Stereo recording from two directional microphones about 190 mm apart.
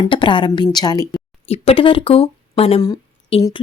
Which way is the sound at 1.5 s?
30° left (ahead or behind).